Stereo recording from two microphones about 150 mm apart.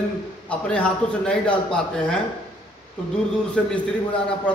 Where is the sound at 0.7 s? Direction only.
10° left (ahead or behind).